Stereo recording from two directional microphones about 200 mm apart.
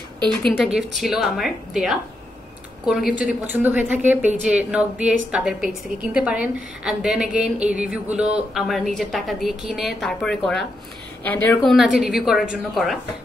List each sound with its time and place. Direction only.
0.4 s a woman's voice: centre (ahead or behind)